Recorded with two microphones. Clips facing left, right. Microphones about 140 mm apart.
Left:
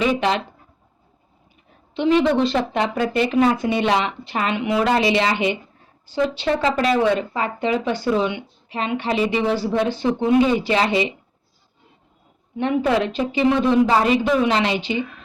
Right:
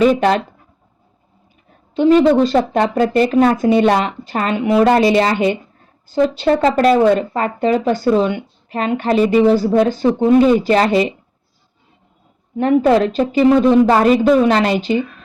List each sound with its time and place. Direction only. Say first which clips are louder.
0.0 s speech: right 7 dB; 45° right (ahead or behind)
2.0 s speech: right 6 dB; 40° right (ahead or behind)
12.5 s speech: right 7 dB; 40° right (ahead or behind)